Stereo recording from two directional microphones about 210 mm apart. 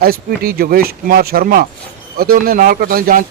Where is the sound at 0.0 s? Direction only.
45° right (ahead or behind).